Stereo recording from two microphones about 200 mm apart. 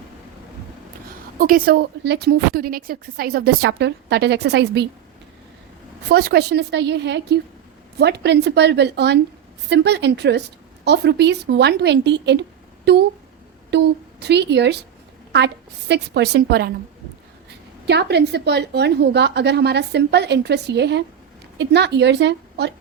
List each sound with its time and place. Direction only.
1.4 s a woman's voice: 45° right (ahead or behind)
6.1 s a woman's voice: 55° right (ahead or behind)
15.9 s a woman's voice: 55° right (ahead or behind)
17.8 s a woman's voice: 55° right (ahead or behind)